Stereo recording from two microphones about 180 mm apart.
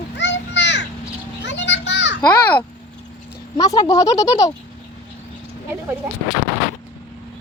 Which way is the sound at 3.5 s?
20° left (ahead or behind).